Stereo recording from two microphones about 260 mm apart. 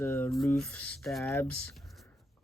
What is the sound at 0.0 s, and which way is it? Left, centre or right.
Speech, centre.